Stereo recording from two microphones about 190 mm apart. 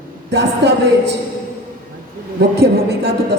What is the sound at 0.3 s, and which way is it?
Speech, 65° right (ahead or behind).